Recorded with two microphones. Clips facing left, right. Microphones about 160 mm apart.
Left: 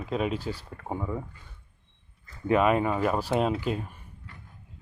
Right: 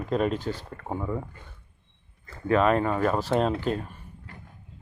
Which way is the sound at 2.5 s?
10° left (ahead or behind).